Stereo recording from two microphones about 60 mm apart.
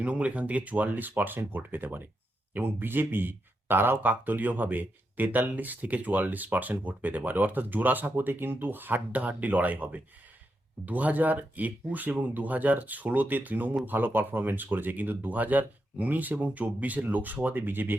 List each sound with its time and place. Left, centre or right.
0.0 s speech: right